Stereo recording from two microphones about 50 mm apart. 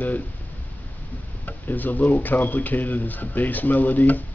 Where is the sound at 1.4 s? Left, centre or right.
Left.